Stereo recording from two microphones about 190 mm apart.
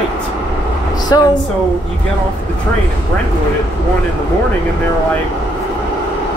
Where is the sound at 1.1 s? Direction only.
20° left (ahead or behind).